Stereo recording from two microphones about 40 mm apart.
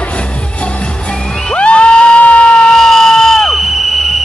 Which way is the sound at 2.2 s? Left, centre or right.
Left.